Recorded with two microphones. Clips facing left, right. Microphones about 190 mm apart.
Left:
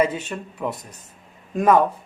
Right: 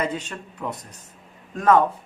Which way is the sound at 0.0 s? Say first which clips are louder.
Left 5 dB; 10° left (ahead or behind).